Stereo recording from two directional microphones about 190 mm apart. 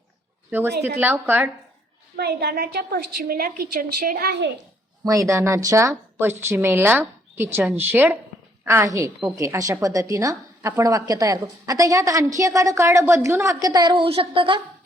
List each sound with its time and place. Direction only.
0.9 s a woman's voice: 10° right (ahead or behind)
2.1 s a woman's voice: 60° right (ahead or behind)
5.0 s a woman's voice: 15° right (ahead or behind)